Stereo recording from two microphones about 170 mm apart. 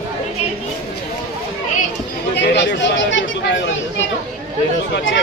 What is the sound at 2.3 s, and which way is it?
Chatter, 80° left.